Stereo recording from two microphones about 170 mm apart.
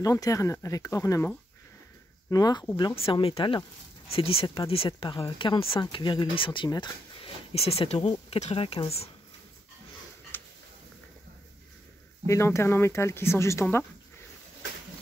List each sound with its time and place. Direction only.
0.0 s speech: 20° left (ahead or behind); by 9.1 s 35° left (ahead or behind)
12.3 s speech: 15° left (ahead or behind)